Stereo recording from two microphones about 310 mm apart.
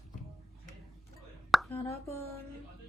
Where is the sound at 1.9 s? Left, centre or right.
Centre.